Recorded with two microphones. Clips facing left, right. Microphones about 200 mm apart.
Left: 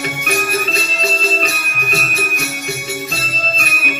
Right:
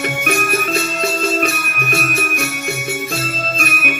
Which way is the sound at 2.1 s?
60° right (ahead or behind).